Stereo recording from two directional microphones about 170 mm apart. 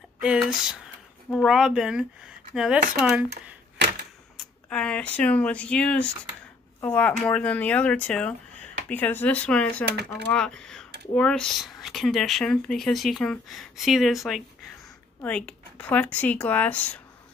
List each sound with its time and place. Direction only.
0.2 s speech: 5° right (ahead or behind)
4.4 s speech: 5° left (ahead or behind)
9.8 s speech: 70° right (ahead or behind)
10.2 s speech: 5° left (ahead or behind)